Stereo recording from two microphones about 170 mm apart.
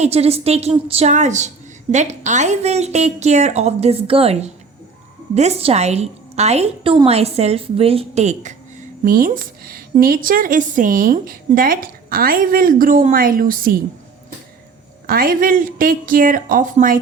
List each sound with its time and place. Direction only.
0.0 s a woman's voice: 35° right (ahead or behind)
9.0 s a woman's voice: 55° right (ahead or behind)
15.0 s a woman's voice: 60° right (ahead or behind)